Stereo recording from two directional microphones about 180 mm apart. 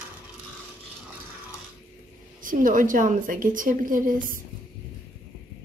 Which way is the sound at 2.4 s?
50° right (ahead or behind).